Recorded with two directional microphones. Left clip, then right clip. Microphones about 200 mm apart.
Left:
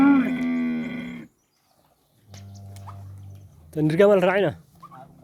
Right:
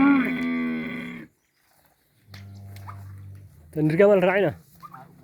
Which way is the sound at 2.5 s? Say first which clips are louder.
Right 1 dB; 55° left (ahead or behind).